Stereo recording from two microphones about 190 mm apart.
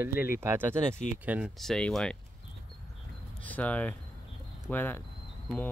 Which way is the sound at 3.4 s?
10° left (ahead or behind).